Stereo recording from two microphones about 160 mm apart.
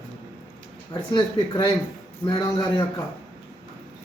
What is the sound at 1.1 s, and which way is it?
Speech, 30° left (ahead or behind).